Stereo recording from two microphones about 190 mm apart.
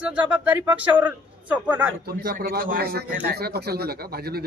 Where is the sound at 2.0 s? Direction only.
55° right (ahead or behind).